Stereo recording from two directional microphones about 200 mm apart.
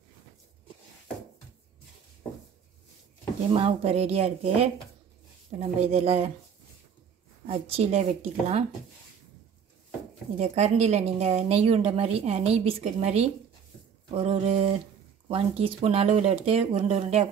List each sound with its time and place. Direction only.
3.5 s a woman's voice: 30° right (ahead or behind)
7.4 s a woman's voice: 30° right (ahead or behind)
10.3 s a woman's voice: 35° right (ahead or behind)